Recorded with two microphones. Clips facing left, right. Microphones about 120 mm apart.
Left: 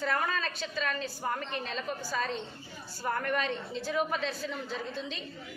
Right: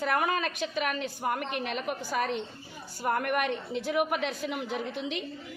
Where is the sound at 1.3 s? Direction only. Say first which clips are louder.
Right 4 dB; 70° right (ahead or behind).